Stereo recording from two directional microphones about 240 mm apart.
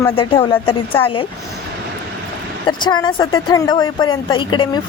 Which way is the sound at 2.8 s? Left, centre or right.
Centre.